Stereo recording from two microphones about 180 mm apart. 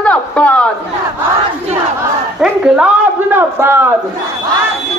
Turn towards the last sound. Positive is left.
turn(degrees=-10)  # may be behind; listen again after turning